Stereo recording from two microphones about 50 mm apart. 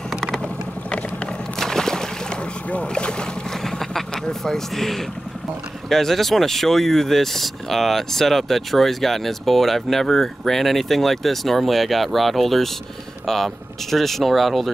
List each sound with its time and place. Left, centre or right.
1.6 s a sound: centre
2.7 s speech: left
3.6 s vehicle: centre
5.9 s speech: centre